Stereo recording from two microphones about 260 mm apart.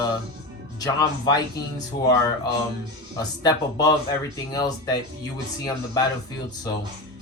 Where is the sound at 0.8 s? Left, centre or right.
Centre.